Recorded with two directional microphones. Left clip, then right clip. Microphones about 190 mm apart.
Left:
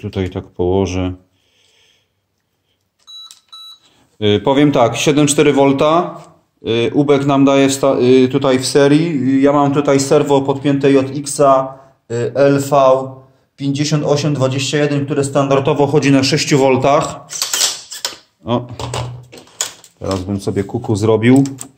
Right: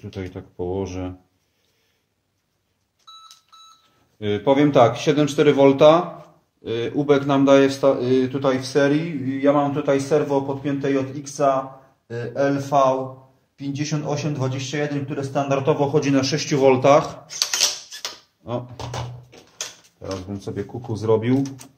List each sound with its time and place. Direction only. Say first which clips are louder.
0.0 s speech: left 11 dB; 45° left (ahead or behind)
4.2 s speech: left 6 dB; 45° left (ahead or behind); by 17.2 s 20° left (ahead or behind)
18.4 s speech: left 10 dB; 40° left (ahead or behind)
20.0 s speech: left 10 dB; 50° left (ahead or behind)